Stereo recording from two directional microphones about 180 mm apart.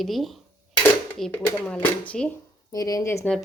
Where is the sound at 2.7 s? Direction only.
20° left (ahead or behind).